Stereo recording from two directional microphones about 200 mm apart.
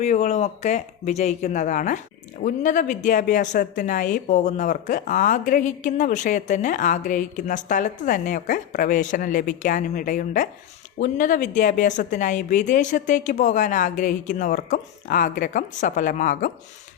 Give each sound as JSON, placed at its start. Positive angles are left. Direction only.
{"t": 0.0, "sound": "speech", "side_deg": 35}